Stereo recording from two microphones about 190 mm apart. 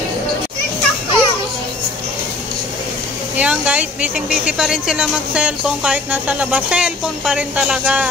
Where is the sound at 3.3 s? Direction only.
5° right (ahead or behind).